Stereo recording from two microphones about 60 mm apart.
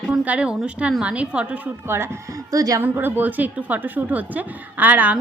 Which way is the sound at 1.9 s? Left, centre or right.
Right.